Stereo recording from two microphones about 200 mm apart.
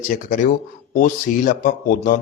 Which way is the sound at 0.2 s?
40° left (ahead or behind).